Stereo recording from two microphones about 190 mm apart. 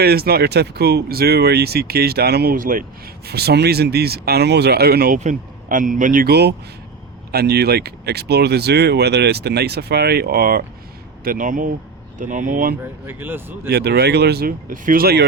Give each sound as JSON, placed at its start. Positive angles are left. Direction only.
{"t": 0.0, "sound": "speech", "side_deg": -55}
{"t": 3.2, "sound": "speech", "side_deg": -55}
{"t": 12.8, "sound": "speech", "side_deg": -10}
{"t": 13.7, "sound": "speech", "side_deg": -55}